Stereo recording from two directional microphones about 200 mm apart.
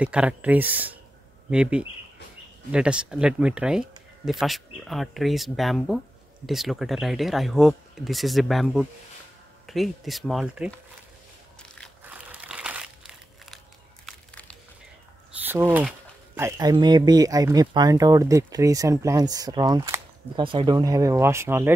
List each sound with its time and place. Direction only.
0.0 s speech: 5° right (ahead or behind)
12.0 s crumpling: 5° right (ahead or behind)
14.0 s crushing: 5° left (ahead or behind)
15.3 s speech: 10° right (ahead or behind)